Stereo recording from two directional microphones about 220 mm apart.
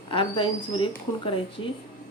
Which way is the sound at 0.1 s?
25° left (ahead or behind).